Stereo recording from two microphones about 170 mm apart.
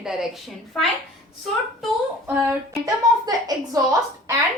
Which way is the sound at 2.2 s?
10° right (ahead or behind).